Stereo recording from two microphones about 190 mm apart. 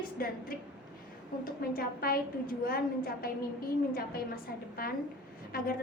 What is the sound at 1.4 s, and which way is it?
A woman's voice, 50° left (ahead or behind).